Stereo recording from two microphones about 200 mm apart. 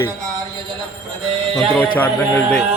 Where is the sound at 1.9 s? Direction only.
10° left (ahead or behind).